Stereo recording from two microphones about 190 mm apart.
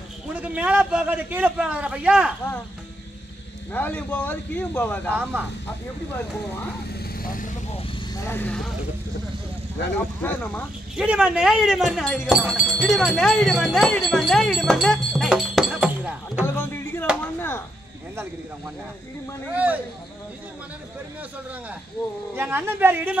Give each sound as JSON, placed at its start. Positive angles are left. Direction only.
{"t": 0.3, "sound": "a man's voice", "side_deg": -5}
{"t": 3.7, "sound": "speech", "side_deg": 10}
{"t": 5.1, "sound": "a man's voice", "side_deg": -10}
{"t": 7.2, "sound": "vehicle", "side_deg": 45}
{"t": 8.3, "sound": "speech", "side_deg": 10}
{"t": 10.2, "sound": "speech", "side_deg": 10}
{"t": 11.0, "sound": "speech", "side_deg": -5}
{"t": 16.4, "sound": "a sound", "side_deg": 10}
{"t": 19.5, "sound": "a man's voice", "side_deg": -5}
{"t": 22.3, "sound": "a man's voice", "side_deg": -10}